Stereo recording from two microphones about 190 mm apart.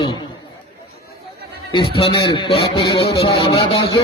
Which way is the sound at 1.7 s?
30° left (ahead or behind).